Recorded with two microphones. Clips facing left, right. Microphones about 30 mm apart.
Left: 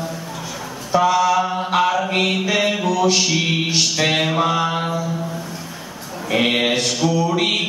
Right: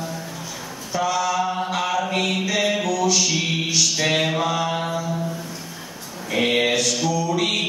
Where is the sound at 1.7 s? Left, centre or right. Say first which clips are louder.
Left 5 dB; left.